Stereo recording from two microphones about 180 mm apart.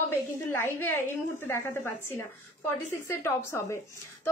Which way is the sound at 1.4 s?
15° left (ahead or behind).